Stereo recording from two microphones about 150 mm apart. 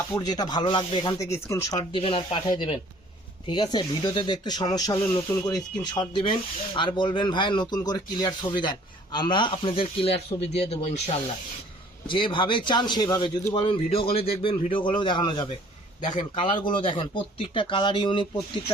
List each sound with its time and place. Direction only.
0.2 s speech: 25° left (ahead or behind)
1.9 s a man's voice: 35° left (ahead or behind)
12.0 s a man's voice: 35° left (ahead or behind)
16.0 s a man's voice: 60° left (ahead or behind)
16.3 s a man's voice: 35° left (ahead or behind)